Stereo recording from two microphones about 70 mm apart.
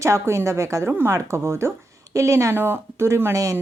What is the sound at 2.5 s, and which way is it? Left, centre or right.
A woman's voice, right.